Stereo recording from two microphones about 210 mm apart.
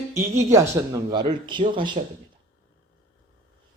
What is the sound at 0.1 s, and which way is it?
A woman's voice, 15° right (ahead or behind).